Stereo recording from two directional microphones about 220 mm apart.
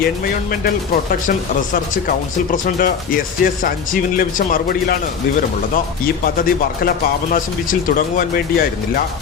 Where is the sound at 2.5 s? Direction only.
40° left (ahead or behind).